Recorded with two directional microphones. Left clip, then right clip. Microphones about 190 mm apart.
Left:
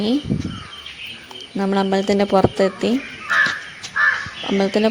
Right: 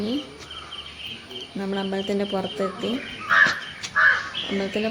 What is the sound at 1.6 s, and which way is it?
A woman's voice, 50° left (ahead or behind).